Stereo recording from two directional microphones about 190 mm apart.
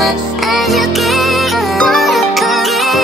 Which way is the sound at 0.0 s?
Centre (ahead or behind).